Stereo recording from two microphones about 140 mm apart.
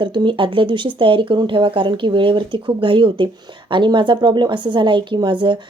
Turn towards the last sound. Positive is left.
turn(degrees=-35)  # may be behind; listen again after turning